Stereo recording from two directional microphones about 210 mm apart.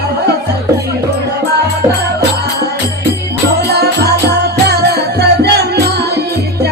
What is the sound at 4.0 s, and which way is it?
Music, 50° right (ahead or behind).